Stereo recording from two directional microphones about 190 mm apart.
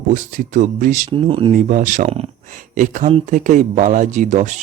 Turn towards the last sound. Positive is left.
turn(degrees=-40)  # may be behind; listen again after turning